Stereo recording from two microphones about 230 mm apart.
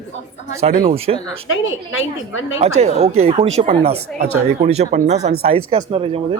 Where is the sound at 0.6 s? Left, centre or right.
Right.